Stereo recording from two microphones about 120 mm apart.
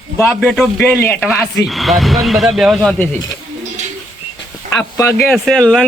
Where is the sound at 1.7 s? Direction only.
Centre (ahead or behind).